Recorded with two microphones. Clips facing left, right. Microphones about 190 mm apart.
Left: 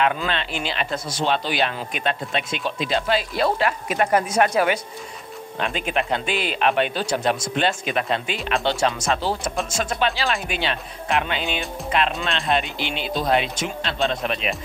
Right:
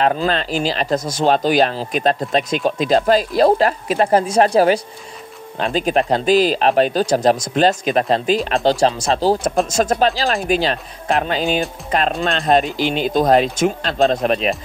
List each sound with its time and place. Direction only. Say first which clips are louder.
0.0 s speech: right 5 dB; 35° right (ahead or behind)